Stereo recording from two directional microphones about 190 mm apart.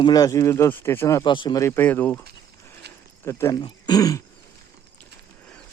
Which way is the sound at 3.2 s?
15° left (ahead or behind).